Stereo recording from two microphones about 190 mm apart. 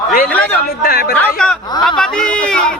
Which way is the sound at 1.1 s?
5° left (ahead or behind).